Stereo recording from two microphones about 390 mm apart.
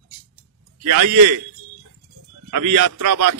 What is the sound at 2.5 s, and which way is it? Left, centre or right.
Speech, right.